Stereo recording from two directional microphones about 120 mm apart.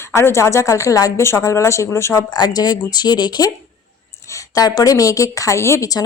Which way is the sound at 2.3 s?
35° left (ahead or behind).